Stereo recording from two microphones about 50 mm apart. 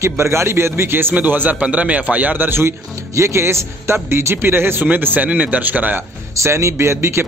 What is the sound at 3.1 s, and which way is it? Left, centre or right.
A man's voice, right.